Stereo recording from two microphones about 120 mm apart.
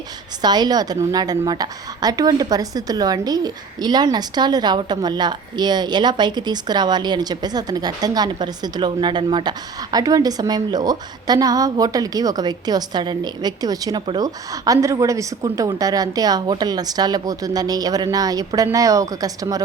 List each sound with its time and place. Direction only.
0.4 s a woman's voice: 35° right (ahead or behind)